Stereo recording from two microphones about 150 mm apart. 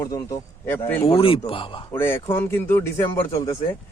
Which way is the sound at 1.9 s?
15° left (ahead or behind).